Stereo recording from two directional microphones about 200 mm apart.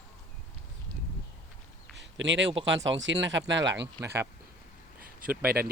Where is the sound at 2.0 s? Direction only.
65° right (ahead or behind).